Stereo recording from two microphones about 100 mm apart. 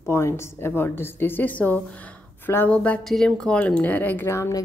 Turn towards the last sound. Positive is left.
turn(degrees=25)  # may be behind; listen again after turning